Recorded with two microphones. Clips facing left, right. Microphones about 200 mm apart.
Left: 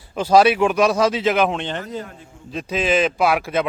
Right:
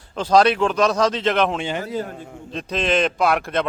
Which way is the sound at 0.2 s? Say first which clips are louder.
Left 2 dB; 10° left (ahead or behind).